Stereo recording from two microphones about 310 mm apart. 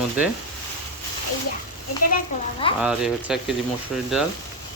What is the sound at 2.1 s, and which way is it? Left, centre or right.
Speech, centre.